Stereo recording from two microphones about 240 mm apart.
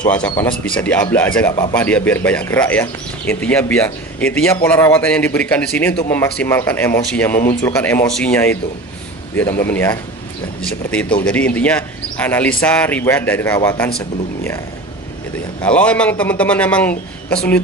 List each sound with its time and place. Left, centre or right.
0.0 s a man's voice: centre
0.3 s speech: centre
0.7 s a man's voice: centre
15.6 s a man's voice: centre